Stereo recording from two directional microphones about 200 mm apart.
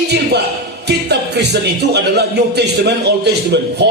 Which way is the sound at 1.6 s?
55° right (ahead or behind).